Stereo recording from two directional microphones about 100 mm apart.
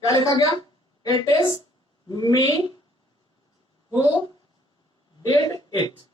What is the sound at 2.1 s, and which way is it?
Speech, 40° left (ahead or behind).